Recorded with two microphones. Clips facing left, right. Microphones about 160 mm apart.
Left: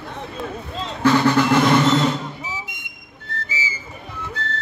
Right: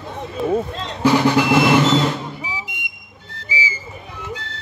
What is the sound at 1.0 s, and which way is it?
Vehicle, 10° right (ahead or behind).